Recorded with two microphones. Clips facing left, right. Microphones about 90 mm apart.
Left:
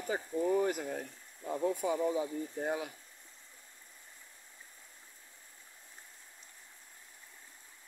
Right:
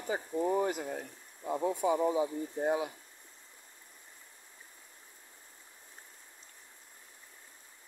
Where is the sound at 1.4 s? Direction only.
20° right (ahead or behind).